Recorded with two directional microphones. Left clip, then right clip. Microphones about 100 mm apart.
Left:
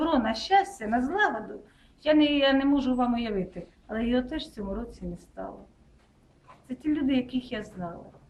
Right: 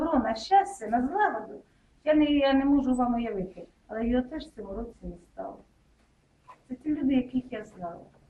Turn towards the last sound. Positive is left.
turn(degrees=10)  # may be behind; listen again after turning